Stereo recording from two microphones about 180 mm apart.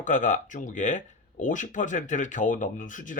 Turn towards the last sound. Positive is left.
turn(degrees=45)  # may be behind; listen again after turning